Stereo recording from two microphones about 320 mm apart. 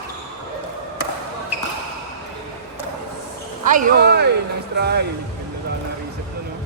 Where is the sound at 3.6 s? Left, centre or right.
Right.